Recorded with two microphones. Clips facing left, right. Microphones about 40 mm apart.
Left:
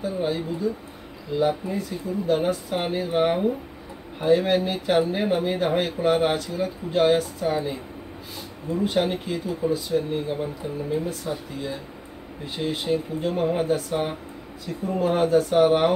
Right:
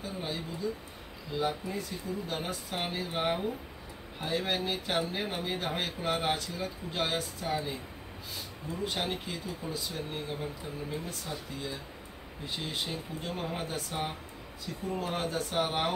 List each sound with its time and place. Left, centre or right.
0.0 s speech: centre
8.8 s speech: centre
15.0 s speech: centre